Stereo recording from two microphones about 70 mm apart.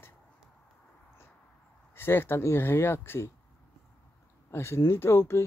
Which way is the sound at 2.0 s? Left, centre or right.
Left.